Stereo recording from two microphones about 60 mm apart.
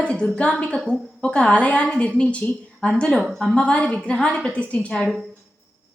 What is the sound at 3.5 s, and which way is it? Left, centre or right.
A woman's voice, centre.